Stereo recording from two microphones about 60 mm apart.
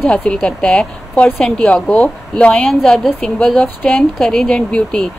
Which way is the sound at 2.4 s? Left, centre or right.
Centre.